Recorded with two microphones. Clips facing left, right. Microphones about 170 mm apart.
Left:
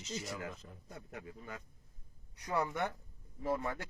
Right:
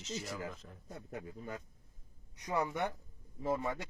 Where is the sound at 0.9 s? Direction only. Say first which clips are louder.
Right 3 dB; 30° right (ahead or behind).